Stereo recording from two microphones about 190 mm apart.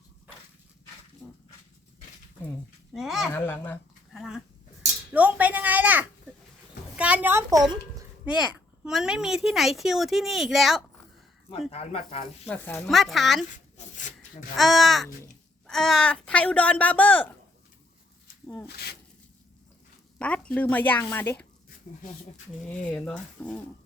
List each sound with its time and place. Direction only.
1.2 s dog: 10° left (ahead or behind)
2.9 s a woman's voice: centre (ahead or behind)
3.3 s speech: 10° left (ahead or behind)
4.1 s a woman's voice: centre (ahead or behind); by 8.0 s 20° right (ahead or behind)
8.2 s a woman's voice: 5° right (ahead or behind)
11.7 s speech: 35° left (ahead or behind)
12.5 s a woman's voice: 10° left (ahead or behind)
13.7 s rub: 40° left (ahead or behind)
14.5 s a woman's voice: centre (ahead or behind)
18.4 s speech: 5° left (ahead or behind)
20.1 s speech: 5° left (ahead or behind)
22.6 s speech: 10° left (ahead or behind)